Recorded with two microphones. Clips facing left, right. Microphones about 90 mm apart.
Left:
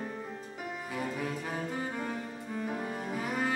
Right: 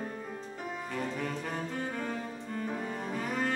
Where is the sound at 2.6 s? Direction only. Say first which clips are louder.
Even; 10° left (ahead or behind).